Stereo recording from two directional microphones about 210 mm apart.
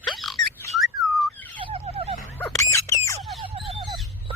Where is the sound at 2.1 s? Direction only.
Centre (ahead or behind).